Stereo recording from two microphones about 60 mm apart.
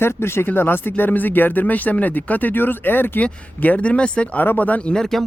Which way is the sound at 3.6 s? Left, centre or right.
Left.